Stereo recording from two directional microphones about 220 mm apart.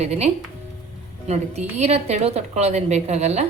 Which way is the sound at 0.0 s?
30° right (ahead or behind).